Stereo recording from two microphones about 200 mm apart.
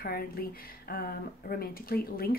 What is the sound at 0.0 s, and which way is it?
Speech, 50° left (ahead or behind).